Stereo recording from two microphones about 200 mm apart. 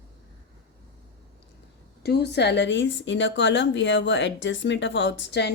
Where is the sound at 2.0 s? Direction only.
55° left (ahead or behind).